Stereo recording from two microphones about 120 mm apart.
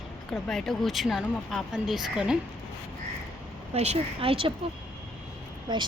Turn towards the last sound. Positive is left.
turn(degrees=-40)  # may be behind; listen again after turning